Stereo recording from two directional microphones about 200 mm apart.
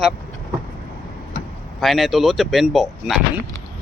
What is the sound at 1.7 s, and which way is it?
Speech, centre (ahead or behind).